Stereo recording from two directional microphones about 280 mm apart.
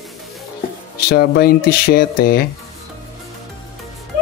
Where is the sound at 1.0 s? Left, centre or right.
Left.